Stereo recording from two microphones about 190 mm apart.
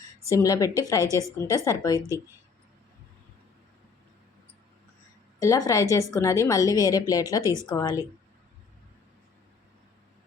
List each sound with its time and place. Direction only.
0.3 s a woman's voice: 15° left (ahead or behind)
5.4 s a woman's voice: 15° left (ahead or behind)
7.4 s a woman's voice: 15° right (ahead or behind)
7.8 s a woman's voice: 15° left (ahead or behind)